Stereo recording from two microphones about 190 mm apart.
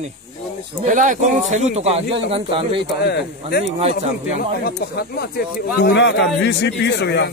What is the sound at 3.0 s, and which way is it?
Speech, 60° left (ahead or behind).